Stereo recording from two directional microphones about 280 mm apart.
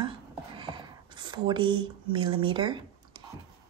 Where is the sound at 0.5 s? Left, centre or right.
Centre.